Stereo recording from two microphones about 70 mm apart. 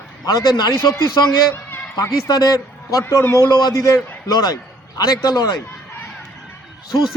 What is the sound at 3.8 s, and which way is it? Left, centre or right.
Speech, left.